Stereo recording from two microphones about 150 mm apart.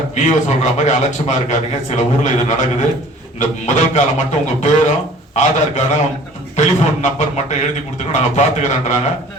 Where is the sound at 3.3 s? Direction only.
50° left (ahead or behind).